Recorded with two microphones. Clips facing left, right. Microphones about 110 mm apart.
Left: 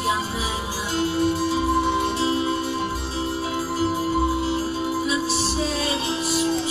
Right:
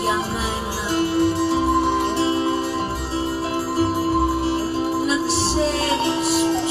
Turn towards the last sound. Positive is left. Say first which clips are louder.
# right 4 dB
turn(degrees=-65)  # may be behind; listen again after turning